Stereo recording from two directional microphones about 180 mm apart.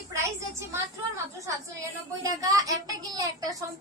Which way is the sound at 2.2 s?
20° right (ahead or behind).